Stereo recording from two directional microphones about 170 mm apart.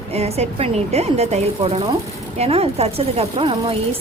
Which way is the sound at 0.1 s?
40° right (ahead or behind).